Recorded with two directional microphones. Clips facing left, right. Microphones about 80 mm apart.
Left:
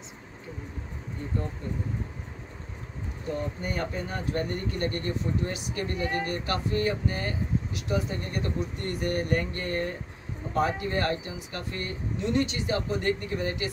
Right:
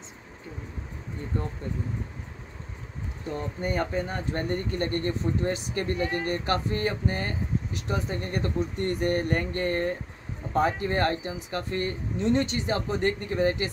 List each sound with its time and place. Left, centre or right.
3.6 s speech: right